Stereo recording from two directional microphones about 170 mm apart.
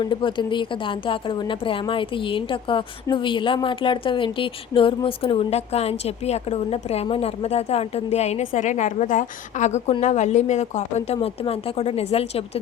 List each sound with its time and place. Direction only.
0.0 s a woman's voice: 30° left (ahead or behind)